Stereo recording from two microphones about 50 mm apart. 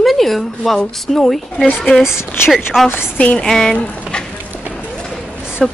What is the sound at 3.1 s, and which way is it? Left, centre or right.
Speech, left.